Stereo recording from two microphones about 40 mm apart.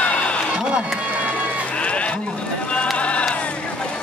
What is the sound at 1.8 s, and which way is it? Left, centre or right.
Sheep, left.